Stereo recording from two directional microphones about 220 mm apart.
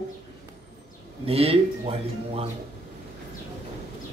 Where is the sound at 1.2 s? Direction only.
25° right (ahead or behind).